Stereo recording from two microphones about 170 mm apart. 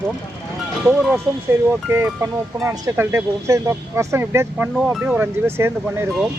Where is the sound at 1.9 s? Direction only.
15° right (ahead or behind).